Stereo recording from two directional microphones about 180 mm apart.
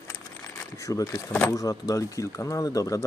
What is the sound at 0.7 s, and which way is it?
Speech, 20° left (ahead or behind).